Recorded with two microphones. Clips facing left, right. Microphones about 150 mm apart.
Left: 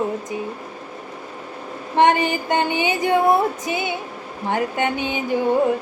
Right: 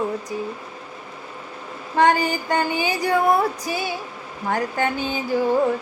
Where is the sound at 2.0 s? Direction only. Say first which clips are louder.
Left 2 dB; 20° left (ahead or behind).